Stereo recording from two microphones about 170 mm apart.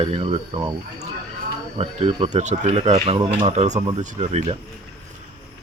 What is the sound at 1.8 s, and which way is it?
Speech, 35° right (ahead or behind).